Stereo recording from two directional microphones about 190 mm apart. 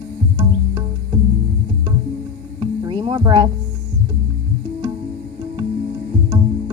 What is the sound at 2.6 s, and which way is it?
Music, 25° right (ahead or behind).